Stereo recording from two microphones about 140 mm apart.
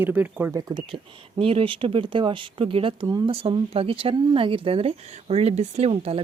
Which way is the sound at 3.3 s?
40° right (ahead or behind).